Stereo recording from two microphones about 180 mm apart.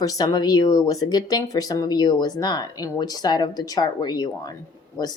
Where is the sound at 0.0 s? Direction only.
20° left (ahead or behind).